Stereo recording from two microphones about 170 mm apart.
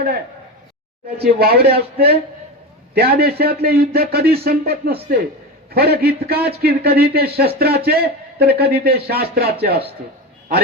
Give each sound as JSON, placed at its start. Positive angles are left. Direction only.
{"t": 1.4, "sound": "a man's voice", "side_deg": -65}